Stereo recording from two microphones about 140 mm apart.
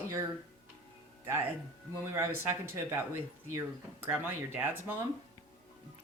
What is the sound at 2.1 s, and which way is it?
Speech, 20° right (ahead or behind).